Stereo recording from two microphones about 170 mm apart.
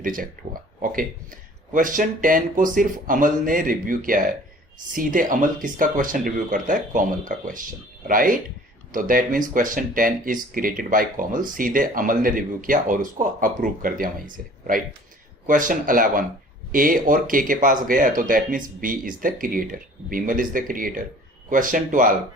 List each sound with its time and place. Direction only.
0.0 s speech: 55° right (ahead or behind)
1.7 s speech: 50° right (ahead or behind)